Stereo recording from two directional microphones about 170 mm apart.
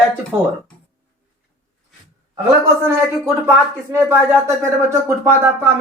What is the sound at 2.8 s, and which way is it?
Speech, 15° right (ahead or behind).